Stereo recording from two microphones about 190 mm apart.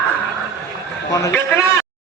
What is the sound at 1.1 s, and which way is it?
Speech, 15° left (ahead or behind).